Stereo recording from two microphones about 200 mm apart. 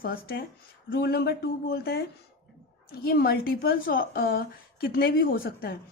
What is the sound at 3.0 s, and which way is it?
A woman's voice, 50° left (ahead or behind).